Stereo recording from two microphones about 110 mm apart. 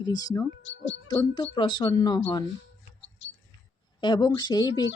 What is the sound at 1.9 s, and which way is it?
Speech, 35° left (ahead or behind).